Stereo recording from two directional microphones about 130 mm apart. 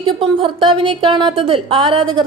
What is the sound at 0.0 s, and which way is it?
A woman's voice, 40° right (ahead or behind).